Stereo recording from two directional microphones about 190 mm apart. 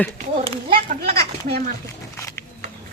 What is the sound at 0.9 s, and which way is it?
Speech, 55° right (ahead or behind).